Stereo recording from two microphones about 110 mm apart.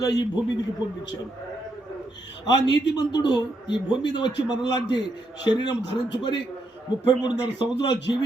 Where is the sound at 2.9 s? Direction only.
40° left (ahead or behind).